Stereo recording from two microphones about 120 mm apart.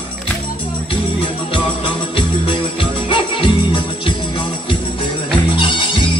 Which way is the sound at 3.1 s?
45° left (ahead or behind).